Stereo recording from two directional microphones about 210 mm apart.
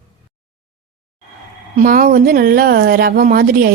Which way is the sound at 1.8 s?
40° right (ahead or behind).